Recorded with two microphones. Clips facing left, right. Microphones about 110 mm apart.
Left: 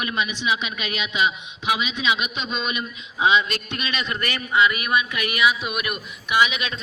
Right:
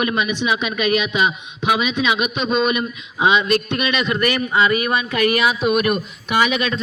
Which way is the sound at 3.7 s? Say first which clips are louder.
Right 8 dB; 30° right (ahead or behind).